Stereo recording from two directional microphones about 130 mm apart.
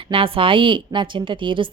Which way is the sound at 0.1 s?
45° right (ahead or behind).